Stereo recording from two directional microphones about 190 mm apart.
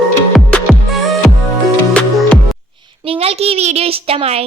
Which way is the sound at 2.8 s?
30° right (ahead or behind).